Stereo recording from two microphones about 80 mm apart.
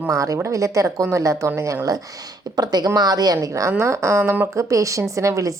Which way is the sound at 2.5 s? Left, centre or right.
Right.